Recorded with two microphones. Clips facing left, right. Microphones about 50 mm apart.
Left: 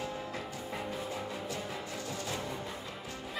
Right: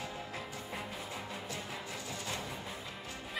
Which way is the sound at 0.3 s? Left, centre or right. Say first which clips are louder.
Left 3 dB; centre.